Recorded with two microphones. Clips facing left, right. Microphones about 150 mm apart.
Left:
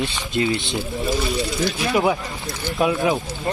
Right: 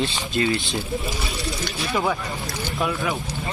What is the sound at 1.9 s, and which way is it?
Speech, 15° left (ahead or behind).